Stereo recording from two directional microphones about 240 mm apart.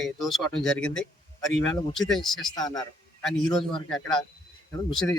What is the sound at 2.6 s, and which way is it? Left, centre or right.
Speech, centre.